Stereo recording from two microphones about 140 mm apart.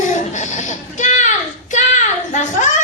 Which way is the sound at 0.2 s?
60° left (ahead or behind).